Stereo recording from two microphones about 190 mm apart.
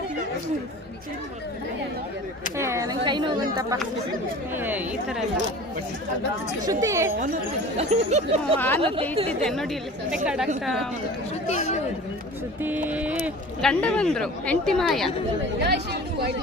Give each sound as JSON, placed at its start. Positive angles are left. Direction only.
{"t": 2.6, "sound": "speech", "side_deg": -15}
{"t": 4.5, "sound": "speech", "side_deg": -10}
{"t": 6.7, "sound": "speech", "side_deg": -20}
{"t": 7.8, "sound": "speech", "side_deg": -35}
{"t": 8.5, "sound": "speech", "side_deg": 10}
{"t": 9.1, "sound": "speech", "side_deg": -30}
{"t": 10.2, "sound": "speech", "side_deg": -5}
{"t": 11.4, "sound": "speech", "side_deg": 35}
{"t": 12.6, "sound": "speech", "side_deg": -10}
{"t": 13.6, "sound": "speech", "side_deg": 5}
{"t": 15.5, "sound": "speech", "side_deg": -65}